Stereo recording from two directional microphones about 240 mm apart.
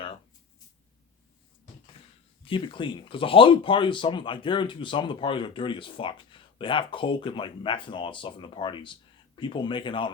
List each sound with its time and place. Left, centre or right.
2.4 s speech: left